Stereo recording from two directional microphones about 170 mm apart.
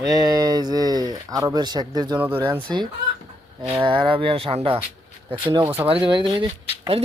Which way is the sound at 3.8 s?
30° right (ahead or behind).